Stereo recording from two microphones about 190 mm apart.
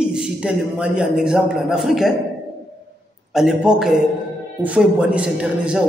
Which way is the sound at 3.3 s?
5° right (ahead or behind).